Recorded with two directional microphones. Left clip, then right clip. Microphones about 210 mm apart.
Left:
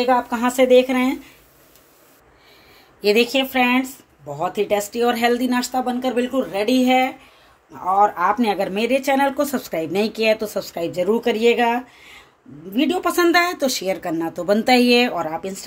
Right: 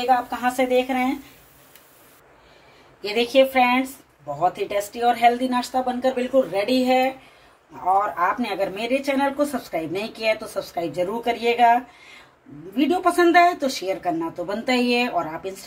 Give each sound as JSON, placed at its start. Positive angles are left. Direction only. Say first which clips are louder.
{"t": 0.0, "sound": "speech", "louder": "left 2 dB", "side_deg": 55}
{"t": 3.0, "sound": "speech", "louder": "left 1 dB", "side_deg": 55}
{"t": 8.0, "sound": "speech", "louder": "left 5 dB", "side_deg": 55}